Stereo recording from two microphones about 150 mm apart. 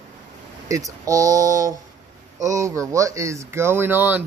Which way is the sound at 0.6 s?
25° right (ahead or behind).